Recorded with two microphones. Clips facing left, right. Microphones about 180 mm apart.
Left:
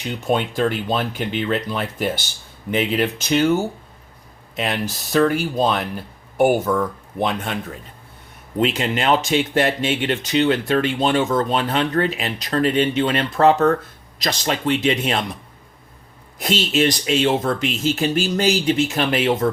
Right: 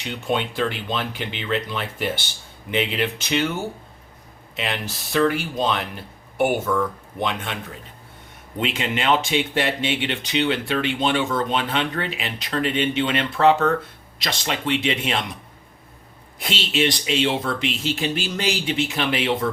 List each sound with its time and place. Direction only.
0.0 s speech: 45° left (ahead or behind)
8.5 s speech: 40° left (ahead or behind)
16.4 s speech: 45° left (ahead or behind)